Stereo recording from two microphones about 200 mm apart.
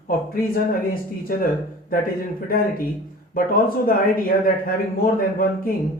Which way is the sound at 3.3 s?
45° left (ahead or behind).